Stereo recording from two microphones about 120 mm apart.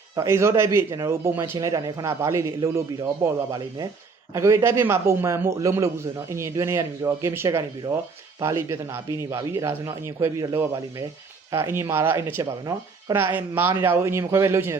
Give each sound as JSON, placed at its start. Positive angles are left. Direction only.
{"t": 0.2, "sound": "a man's voice", "side_deg": -25}
{"t": 13.1, "sound": "a man's voice", "side_deg": -20}